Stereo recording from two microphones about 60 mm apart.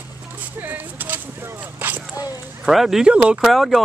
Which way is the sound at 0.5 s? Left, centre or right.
Right.